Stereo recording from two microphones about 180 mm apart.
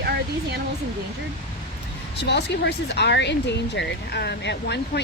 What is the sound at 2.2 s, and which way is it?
Speech, 70° left (ahead or behind).